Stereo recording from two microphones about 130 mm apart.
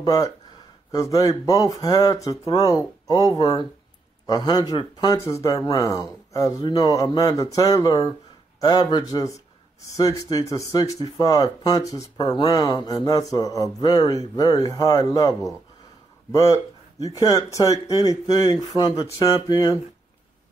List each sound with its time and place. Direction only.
0.0 s a man's voice: 30° left (ahead or behind)